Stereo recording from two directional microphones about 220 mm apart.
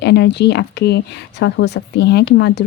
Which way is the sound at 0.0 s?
50° left (ahead or behind).